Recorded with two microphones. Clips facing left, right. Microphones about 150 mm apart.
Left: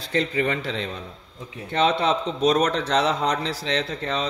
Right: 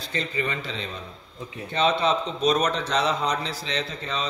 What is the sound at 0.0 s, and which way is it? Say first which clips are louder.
A man's voice: left 5 dB; 80° left.